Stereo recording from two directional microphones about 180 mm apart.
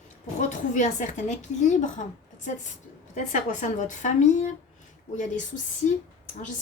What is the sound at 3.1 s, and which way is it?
A woman's voice, 40° left (ahead or behind).